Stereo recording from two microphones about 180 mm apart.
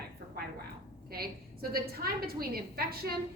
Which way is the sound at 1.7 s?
55° right (ahead or behind).